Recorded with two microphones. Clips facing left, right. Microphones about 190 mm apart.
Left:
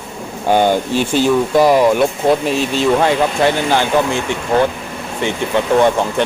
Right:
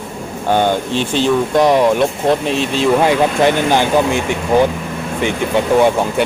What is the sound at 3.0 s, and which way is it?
Speech, 15° right (ahead or behind).